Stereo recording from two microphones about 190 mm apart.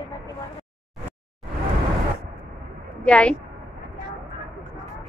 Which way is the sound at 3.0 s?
5° left (ahead or behind).